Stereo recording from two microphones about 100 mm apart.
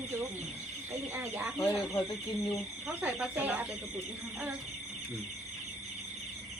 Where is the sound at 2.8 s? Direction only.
10° right (ahead or behind).